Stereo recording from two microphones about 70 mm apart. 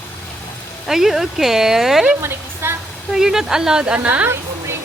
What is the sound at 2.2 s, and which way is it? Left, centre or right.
Speech, right.